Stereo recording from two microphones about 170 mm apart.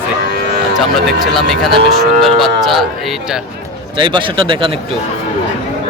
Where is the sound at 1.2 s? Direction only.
Centre (ahead or behind).